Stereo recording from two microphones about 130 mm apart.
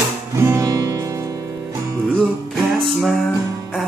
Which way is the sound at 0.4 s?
20° right (ahead or behind).